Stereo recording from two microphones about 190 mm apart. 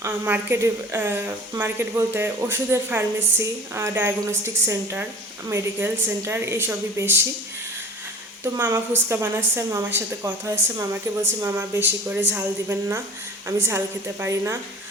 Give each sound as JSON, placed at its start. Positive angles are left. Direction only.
{"t": 0.0, "sound": "a woman's voice", "side_deg": -10}
{"t": 8.5, "sound": "a woman's voice", "side_deg": -10}